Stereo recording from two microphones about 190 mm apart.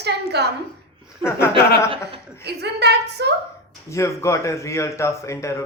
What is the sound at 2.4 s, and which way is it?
Speech, 60° right (ahead or behind).